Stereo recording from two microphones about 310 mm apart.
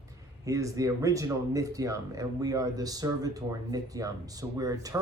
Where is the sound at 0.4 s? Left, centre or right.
Centre.